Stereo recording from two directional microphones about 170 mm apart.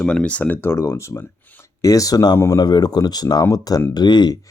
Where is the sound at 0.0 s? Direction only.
5° left (ahead or behind).